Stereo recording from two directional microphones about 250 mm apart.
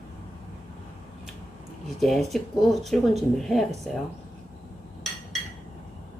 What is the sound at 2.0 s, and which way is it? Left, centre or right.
Speech, centre.